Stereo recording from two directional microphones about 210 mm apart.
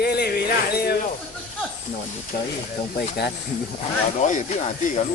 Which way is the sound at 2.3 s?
50° left (ahead or behind).